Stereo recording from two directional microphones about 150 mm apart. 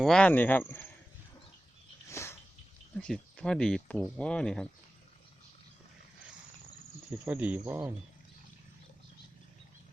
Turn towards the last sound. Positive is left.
turn(degrees=-15)  # may be behind; listen again after turning